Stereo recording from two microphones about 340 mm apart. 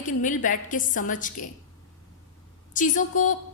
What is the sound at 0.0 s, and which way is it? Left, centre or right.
A woman's voice, left.